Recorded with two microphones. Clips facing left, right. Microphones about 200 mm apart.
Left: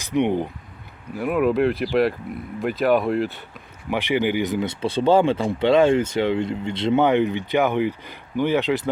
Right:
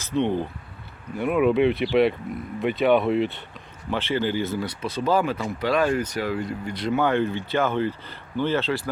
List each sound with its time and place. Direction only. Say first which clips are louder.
0.0 s speech: left 3 dB; 15° left (ahead or behind)
1.1 s speech: even; centre (ahead or behind)
3.8 s speech: left 3 dB; 15° left (ahead or behind)